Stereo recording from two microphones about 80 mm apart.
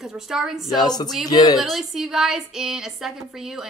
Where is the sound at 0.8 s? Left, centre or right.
Left.